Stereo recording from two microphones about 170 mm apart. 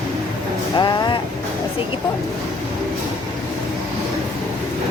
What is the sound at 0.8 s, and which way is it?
Speech, 25° left (ahead or behind).